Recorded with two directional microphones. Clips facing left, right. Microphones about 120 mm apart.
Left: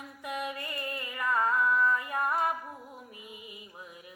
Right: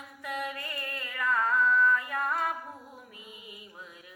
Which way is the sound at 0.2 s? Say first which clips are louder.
Even; 15° left (ahead or behind).